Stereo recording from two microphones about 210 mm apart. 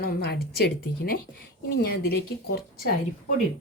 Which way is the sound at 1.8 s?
45° left (ahead or behind).